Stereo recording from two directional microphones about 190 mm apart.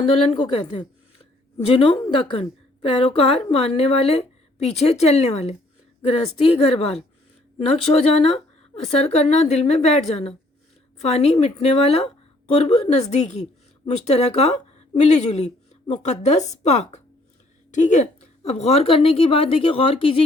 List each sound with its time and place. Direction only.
0.0 s a woman's voice: 30° left (ahead or behind)